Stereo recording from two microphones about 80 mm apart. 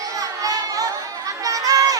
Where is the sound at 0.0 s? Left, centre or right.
Right.